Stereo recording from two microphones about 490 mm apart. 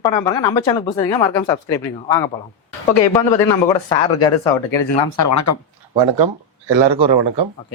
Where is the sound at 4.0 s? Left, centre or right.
Left.